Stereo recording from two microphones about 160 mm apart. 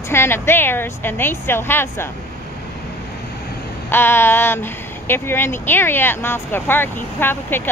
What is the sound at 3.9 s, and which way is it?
Speech, 15° left (ahead or behind).